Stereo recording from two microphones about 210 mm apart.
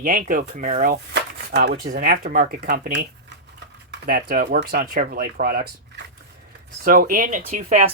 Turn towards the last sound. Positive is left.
turn(degrees=-40)  # may be behind; listen again after turning